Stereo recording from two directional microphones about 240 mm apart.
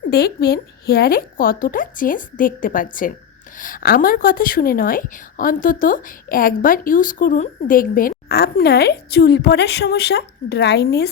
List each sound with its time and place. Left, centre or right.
0.1 s a woman's voice: left